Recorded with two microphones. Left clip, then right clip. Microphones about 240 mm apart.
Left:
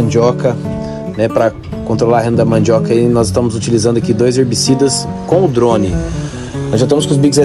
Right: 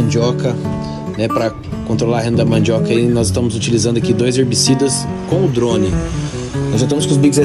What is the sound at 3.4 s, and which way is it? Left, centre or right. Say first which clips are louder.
Speech: left 3 dB; left.